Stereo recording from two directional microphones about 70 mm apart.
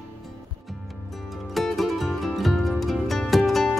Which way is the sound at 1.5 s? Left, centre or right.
Centre.